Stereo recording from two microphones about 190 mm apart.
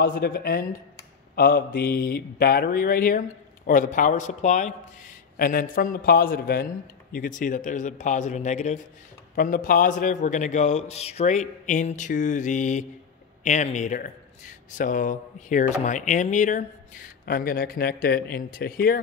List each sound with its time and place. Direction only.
0.0 s a man's voice: 50° left (ahead or behind)
17.3 s speech: 50° left (ahead or behind)